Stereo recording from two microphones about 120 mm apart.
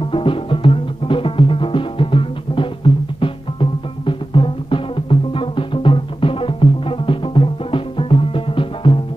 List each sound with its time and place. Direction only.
0.1 s music: 45° left (ahead or behind)